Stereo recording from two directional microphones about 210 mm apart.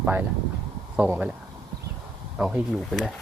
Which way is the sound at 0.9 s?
5° right (ahead or behind).